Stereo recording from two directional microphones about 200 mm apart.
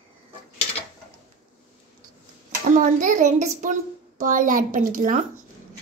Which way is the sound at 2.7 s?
40° right (ahead or behind).